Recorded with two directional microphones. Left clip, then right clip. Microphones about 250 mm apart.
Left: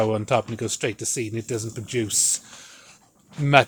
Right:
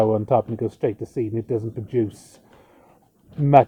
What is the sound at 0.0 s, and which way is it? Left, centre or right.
Speech, centre.